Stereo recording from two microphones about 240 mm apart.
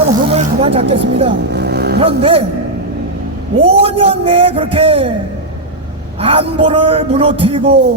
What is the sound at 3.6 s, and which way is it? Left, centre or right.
A man's voice, right.